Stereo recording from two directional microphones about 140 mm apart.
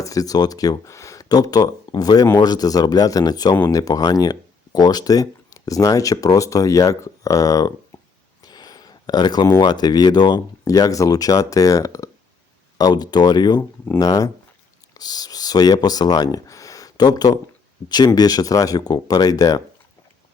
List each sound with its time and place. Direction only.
0.0 s speech: 25° left (ahead or behind)
3.5 s speech: 15° left (ahead or behind)
3.8 s speech: 25° left (ahead or behind)
8.4 s a sound: 30° left (ahead or behind)
9.6 s speech: 30° left (ahead or behind)
13.6 s speech: 15° left (ahead or behind)